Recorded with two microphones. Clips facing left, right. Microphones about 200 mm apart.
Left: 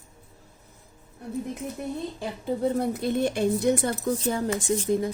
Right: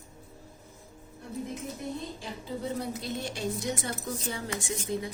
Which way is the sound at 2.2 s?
55° left (ahead or behind).